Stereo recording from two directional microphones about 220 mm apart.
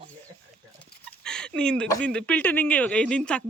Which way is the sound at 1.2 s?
5° left (ahead or behind).